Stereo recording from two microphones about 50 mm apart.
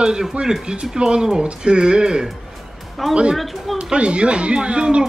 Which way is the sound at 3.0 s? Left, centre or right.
Centre.